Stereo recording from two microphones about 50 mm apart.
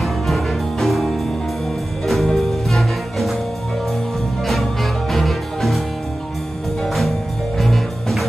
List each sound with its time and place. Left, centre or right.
0.0 s music: centre
5.1 s music: centre
6.8 s music: centre